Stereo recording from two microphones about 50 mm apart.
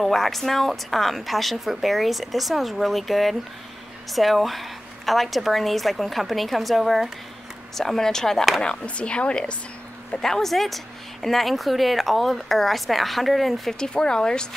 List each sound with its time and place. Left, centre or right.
0.0 s a woman's voice: centre; by 9.6 s left
10.2 s a woman's voice: centre
13.7 s speech: centre